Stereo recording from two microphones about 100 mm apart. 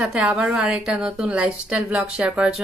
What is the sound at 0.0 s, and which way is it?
Speech, 15° right (ahead or behind).